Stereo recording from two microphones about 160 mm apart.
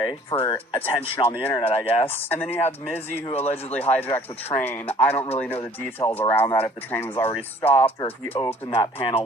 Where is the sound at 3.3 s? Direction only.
40° left (ahead or behind).